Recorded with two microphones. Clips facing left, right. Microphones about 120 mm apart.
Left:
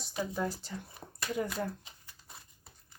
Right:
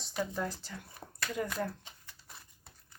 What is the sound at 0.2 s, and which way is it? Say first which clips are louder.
Speech: left 1 dB; 10° left (ahead or behind).